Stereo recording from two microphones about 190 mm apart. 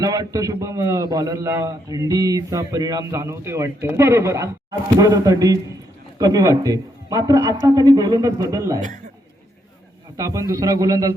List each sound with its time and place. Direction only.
0.0 s a man's voice: 20° right (ahead or behind)
10.2 s a man's voice: 15° right (ahead or behind)